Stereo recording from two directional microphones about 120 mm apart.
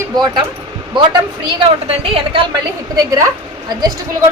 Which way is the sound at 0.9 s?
40° right (ahead or behind).